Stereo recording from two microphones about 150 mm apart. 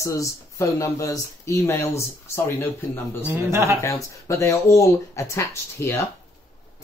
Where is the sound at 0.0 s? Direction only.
20° left (ahead or behind).